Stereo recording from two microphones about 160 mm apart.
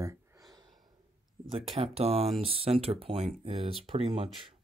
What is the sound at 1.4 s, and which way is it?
Speech, 35° right (ahead or behind).